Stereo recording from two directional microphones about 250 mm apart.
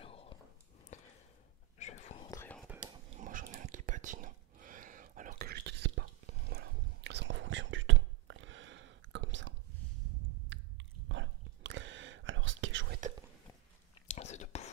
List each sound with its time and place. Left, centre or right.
0.0 s whispering: left
0.9 s sniff: left
1.8 s whispering: left
2.3 s whispering: centre
2.9 s whispering: right
10.5 s whispering: right
14.0 s whispering: left